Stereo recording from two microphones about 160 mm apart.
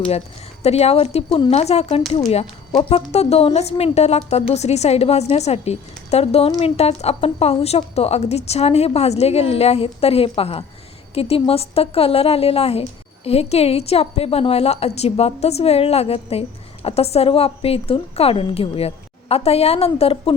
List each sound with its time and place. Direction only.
0.6 s speech: 40° left (ahead or behind)